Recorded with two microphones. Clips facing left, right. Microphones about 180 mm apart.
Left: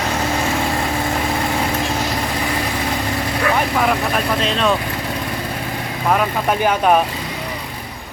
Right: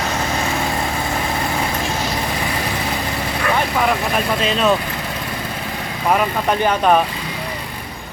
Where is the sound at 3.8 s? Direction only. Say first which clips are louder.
Even; centre (ahead or behind).